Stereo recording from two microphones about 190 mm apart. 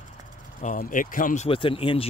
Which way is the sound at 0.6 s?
45° left (ahead or behind).